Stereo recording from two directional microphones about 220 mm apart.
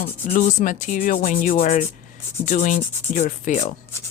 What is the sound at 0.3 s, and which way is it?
Rub, 35° left (ahead or behind).